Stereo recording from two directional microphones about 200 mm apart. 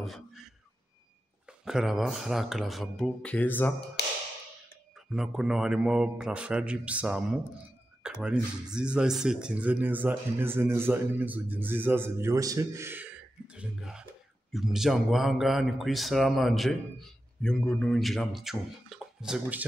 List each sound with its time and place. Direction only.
0.0 s a sound: centre (ahead or behind)
1.6 s speech: centre (ahead or behind)
4.0 s tap: 60° left (ahead or behind)
5.1 s speech: 5° right (ahead or behind)